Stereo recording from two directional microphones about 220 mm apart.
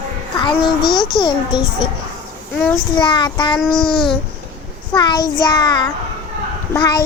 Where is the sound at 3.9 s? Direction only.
20° left (ahead or behind).